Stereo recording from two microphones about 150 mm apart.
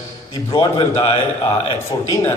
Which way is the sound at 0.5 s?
35° left (ahead or behind).